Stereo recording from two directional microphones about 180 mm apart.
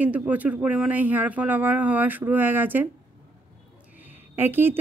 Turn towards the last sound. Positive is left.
turn(degrees=-10)  # may be behind; listen again after turning